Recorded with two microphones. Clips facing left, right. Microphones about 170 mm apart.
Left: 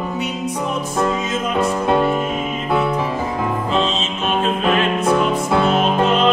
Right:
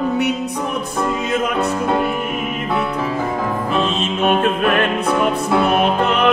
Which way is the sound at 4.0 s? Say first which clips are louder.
Right 4 dB; 55° right (ahead or behind).